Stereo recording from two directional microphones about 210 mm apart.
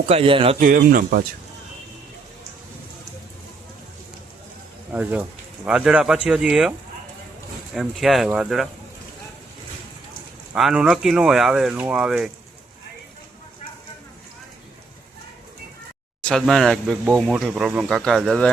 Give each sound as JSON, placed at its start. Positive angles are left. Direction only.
{"t": 0.1, "sound": "a man's voice", "side_deg": -25}
{"t": 0.6, "sound": "speech", "side_deg": -40}
{"t": 4.9, "sound": "speech", "side_deg": -10}
{"t": 10.5, "sound": "speech", "side_deg": -5}
{"t": 16.2, "sound": "speech", "side_deg": 0}